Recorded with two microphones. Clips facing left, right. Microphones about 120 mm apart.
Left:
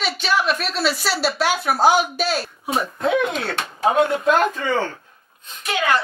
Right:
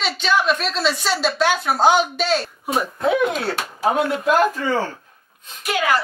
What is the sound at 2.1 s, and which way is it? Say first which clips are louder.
Speech: right 2 dB; 5° left (ahead or behind).